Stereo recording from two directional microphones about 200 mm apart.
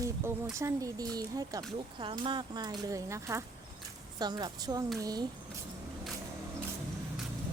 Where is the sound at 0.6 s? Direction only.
20° right (ahead or behind).